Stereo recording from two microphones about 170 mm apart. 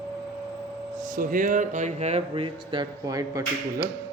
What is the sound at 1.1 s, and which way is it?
Speech, 50° right (ahead or behind).